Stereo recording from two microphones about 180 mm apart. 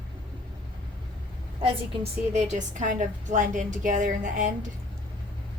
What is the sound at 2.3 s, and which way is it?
A woman's voice, 40° right (ahead or behind).